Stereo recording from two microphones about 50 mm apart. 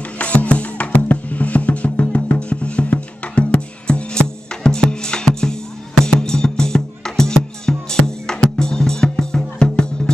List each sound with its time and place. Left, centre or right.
0.2 s music: left